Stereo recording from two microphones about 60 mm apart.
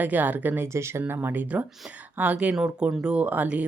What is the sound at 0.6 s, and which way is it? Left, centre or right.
Speech, right.